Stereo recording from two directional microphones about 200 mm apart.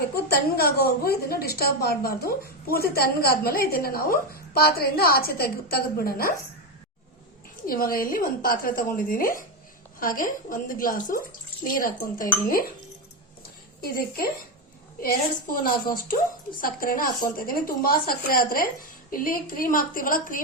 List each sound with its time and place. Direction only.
0.3 s a woman's voice: 50° left (ahead or behind)
7.7 s a woman's voice: 45° left (ahead or behind)
13.8 s a woman's voice: 50° left (ahead or behind)